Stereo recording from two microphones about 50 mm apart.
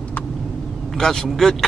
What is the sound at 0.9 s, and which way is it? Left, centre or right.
Speech, centre.